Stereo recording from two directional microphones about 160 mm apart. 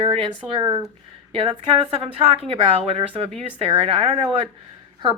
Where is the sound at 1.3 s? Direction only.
35° right (ahead or behind).